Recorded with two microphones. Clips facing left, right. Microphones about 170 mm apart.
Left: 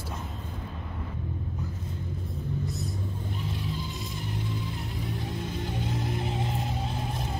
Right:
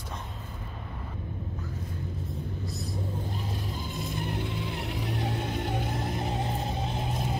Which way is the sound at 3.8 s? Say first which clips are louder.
Right 2 dB; 50° right (ahead or behind).